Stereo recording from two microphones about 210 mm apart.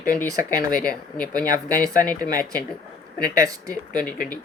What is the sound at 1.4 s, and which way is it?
Speech, 40° left (ahead or behind).